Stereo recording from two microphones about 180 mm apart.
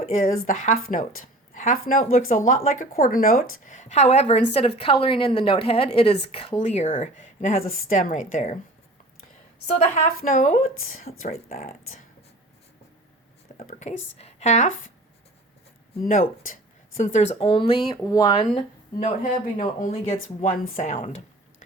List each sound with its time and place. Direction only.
0.0 s speech: 45° left (ahead or behind)
9.7 s speech: 45° left (ahead or behind)
13.6 s speech: 40° left (ahead or behind)
16.0 s speech: 50° left (ahead or behind)
17.3 s speech: 30° left (ahead or behind)
19.2 s speech: 45° left (ahead or behind)